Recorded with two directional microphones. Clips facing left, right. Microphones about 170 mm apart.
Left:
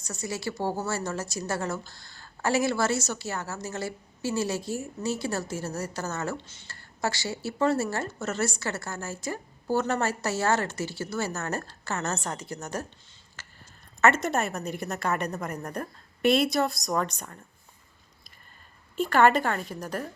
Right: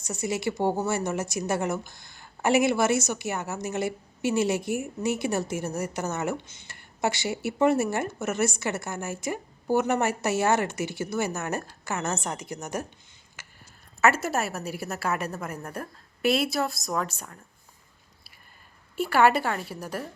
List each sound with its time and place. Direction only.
0.0 s speech: 25° right (ahead or behind)
13.4 s a sound: 15° right (ahead or behind)
14.0 s a woman's voice: 5° right (ahead or behind)
18.9 s a woman's voice: 10° right (ahead or behind)